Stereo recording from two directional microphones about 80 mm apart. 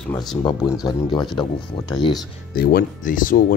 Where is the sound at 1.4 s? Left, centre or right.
Left.